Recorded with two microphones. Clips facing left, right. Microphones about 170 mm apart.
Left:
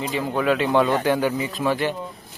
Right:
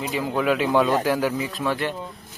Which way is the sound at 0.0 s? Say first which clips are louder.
Left 1 dB; 5° right (ahead or behind).